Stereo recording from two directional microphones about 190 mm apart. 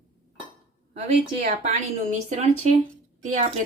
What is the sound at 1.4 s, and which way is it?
Speech, 40° right (ahead or behind).